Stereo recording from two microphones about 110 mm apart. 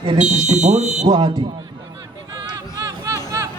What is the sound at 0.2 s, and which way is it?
Speech, 90° right.